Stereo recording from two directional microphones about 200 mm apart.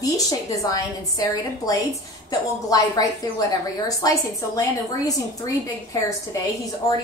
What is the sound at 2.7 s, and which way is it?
A woman's voice, 20° left (ahead or behind).